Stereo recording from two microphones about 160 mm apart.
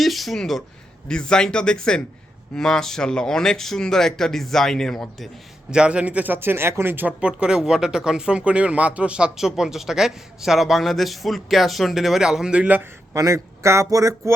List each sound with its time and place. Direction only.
0.0 s a man's voice: centre (ahead or behind)
13.1 s speech: 20° right (ahead or behind)